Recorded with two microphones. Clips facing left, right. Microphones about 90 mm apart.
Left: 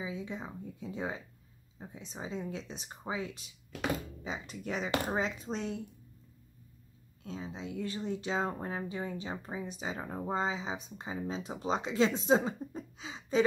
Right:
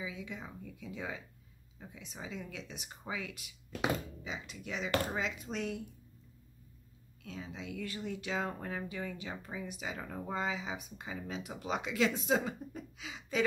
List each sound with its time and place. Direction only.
0.0 s speech: 30° left (ahead or behind)
7.2 s speech: 30° left (ahead or behind)